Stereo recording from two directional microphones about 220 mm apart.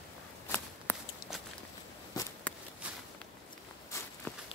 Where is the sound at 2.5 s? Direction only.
5° left (ahead or behind).